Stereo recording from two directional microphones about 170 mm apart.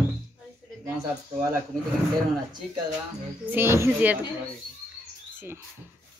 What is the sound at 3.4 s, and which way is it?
Speech, 10° right (ahead or behind).